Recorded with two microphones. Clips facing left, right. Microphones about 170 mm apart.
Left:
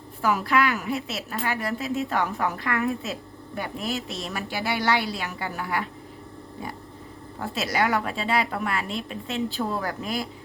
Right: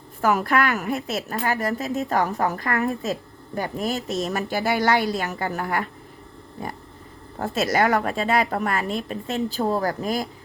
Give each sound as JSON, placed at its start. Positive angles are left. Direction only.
{"t": 0.2, "sound": "a woman's voice", "side_deg": -50}
{"t": 7.3, "sound": "a woman's voice", "side_deg": -45}